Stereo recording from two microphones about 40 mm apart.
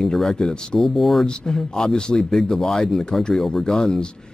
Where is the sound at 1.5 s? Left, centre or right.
Centre.